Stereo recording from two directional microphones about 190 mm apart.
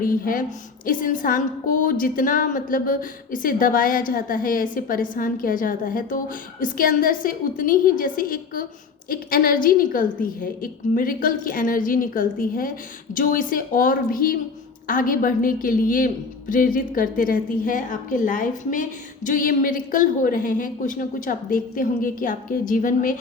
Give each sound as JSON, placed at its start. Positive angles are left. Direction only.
{"t": 0.0, "sound": "a woman's voice", "side_deg": 50}